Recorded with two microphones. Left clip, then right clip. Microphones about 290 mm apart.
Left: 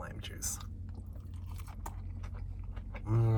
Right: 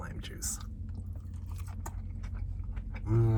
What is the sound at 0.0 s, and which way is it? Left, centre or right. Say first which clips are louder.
Whispering: even; centre.